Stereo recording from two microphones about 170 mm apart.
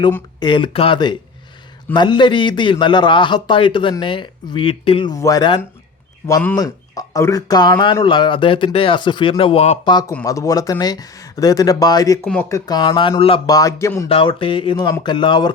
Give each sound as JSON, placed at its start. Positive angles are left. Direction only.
{"t": 0.3, "sound": "speech", "side_deg": 25}
{"t": 5.1, "sound": "speech", "side_deg": 20}
{"t": 9.9, "sound": "speech", "side_deg": 20}
{"t": 12.2, "sound": "speech", "side_deg": 5}
{"t": 12.5, "sound": "speech", "side_deg": 20}
{"t": 13.6, "sound": "speech", "side_deg": 20}
{"t": 14.1, "sound": "speech", "side_deg": 30}